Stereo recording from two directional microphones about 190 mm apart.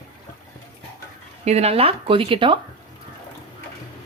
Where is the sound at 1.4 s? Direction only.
35° right (ahead or behind).